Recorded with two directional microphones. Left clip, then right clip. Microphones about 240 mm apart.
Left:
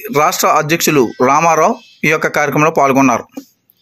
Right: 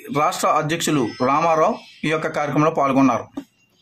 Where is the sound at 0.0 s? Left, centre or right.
Left.